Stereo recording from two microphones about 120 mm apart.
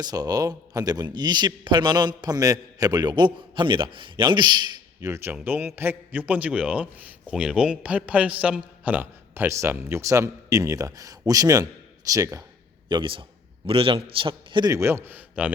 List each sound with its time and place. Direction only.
0.0 s a man's voice: 30° right (ahead or behind)
4.9 s a man's voice: 25° right (ahead or behind)
12.9 s a man's voice: 45° right (ahead or behind)
14.7 s a man's voice: 20° right (ahead or behind)